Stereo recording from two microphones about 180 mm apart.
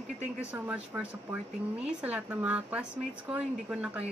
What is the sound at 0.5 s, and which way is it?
A man's voice, 10° right (ahead or behind).